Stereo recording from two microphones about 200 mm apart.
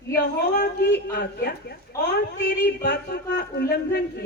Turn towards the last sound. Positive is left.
turn(degrees=55)  # may be behind; listen again after turning